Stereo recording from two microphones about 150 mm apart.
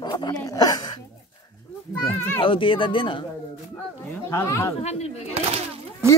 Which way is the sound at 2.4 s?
35° left (ahead or behind).